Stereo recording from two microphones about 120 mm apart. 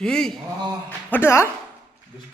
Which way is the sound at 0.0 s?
5° left (ahead or behind).